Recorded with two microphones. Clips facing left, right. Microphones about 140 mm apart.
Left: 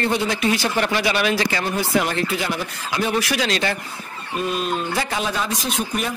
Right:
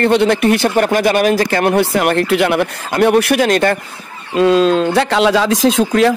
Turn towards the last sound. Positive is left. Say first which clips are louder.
# right 13 dB
turn(degrees=-90)